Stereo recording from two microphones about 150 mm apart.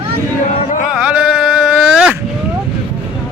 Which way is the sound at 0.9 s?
5° right (ahead or behind).